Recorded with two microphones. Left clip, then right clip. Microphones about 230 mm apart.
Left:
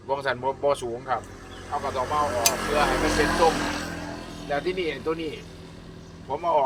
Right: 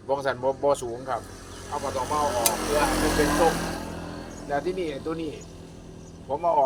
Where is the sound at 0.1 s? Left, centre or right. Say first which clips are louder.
Right 1 dB; centre.